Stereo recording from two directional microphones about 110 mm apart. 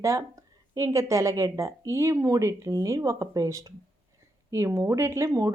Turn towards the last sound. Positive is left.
turn(degrees=-30)  # may be behind; listen again after turning